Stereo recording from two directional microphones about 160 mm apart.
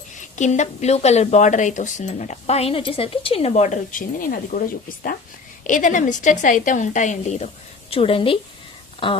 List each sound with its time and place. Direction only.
0.2 s speech: 50° left (ahead or behind); by 9.2 s 30° left (ahead or behind)